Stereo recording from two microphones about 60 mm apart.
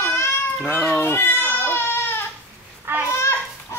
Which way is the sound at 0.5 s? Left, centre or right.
Centre.